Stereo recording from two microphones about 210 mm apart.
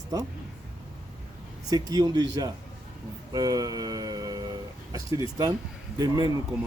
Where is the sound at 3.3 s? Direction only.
15° right (ahead or behind).